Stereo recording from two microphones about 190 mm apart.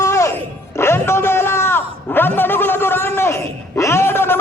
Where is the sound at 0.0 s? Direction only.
15° left (ahead or behind).